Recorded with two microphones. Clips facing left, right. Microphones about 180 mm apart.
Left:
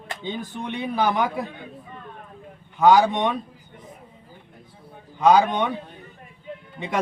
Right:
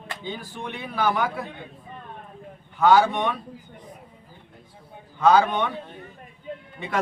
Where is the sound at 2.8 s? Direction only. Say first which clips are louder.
Left 2 dB; 15° left (ahead or behind).